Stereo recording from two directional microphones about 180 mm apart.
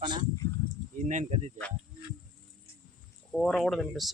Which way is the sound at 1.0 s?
45° right (ahead or behind).